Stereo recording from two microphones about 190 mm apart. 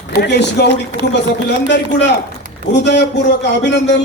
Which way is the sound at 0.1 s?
60° left (ahead or behind).